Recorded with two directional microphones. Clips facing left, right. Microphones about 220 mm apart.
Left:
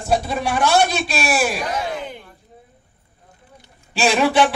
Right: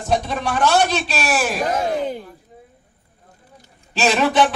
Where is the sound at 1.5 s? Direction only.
45° right (ahead or behind).